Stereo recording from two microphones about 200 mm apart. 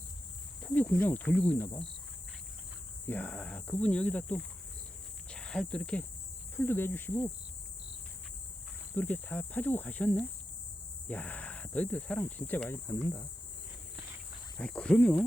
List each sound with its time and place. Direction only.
0.6 s speech: 5° left (ahead or behind)
3.1 s speech: 10° left (ahead or behind)
9.0 s speech: 10° left (ahead or behind)
14.6 s speech: 5° left (ahead or behind)